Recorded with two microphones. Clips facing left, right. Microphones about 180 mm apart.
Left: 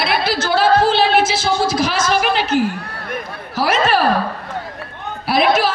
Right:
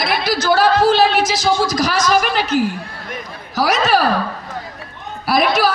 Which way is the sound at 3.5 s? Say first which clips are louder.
Even; 40° right (ahead or behind).